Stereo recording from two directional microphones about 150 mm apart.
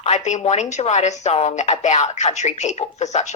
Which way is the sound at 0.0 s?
50° left (ahead or behind).